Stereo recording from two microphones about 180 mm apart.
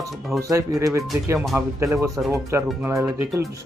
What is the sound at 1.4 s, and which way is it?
Speech, 5° right (ahead or behind).